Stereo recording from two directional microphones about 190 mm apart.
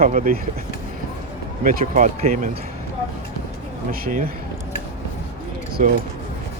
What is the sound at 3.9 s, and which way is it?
Speech, 50° right (ahead or behind).